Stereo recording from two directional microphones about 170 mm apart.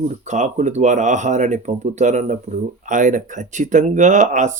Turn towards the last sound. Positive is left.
turn(degrees=-45)  # may be behind; listen again after turning